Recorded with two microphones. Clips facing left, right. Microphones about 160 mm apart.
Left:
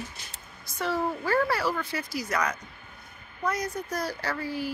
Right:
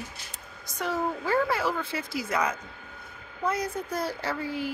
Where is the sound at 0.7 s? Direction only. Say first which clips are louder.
Left 1 dB; 20° right (ahead or behind).